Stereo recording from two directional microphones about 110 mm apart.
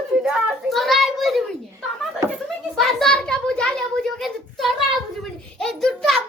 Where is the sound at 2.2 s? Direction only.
25° right (ahead or behind).